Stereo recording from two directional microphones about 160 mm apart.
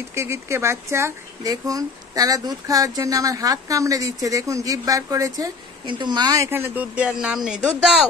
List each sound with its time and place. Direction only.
0.1 s speech: 15° right (ahead or behind)